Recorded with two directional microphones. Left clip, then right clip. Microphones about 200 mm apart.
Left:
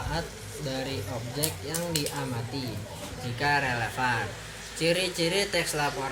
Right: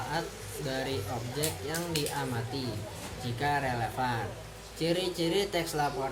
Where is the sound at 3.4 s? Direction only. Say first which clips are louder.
Left 4 dB; 10° right (ahead or behind).